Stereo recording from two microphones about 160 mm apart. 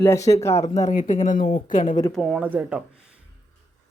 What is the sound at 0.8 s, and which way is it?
Speech, 50° left (ahead or behind).